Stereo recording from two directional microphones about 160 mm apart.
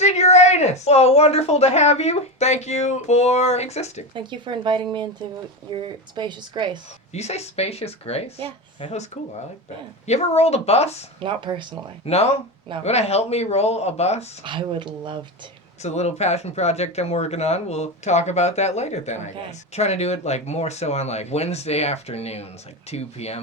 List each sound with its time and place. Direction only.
0.0 s speech: 45° left (ahead or behind)
4.1 s speech: 30° right (ahead or behind)
7.1 s speech: 40° left (ahead or behind)
10.1 s speech: 40° left (ahead or behind)
11.2 s speech: 30° right (ahead or behind)
12.0 s speech: 40° left (ahead or behind)
14.4 s speech: 30° right (ahead or behind)
15.8 s speech: 45° left (ahead or behind)